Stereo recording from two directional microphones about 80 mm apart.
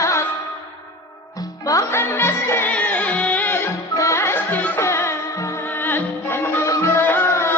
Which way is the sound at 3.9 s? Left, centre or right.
Left.